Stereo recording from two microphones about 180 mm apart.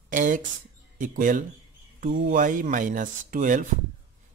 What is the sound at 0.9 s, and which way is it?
Speech, 50° right (ahead or behind).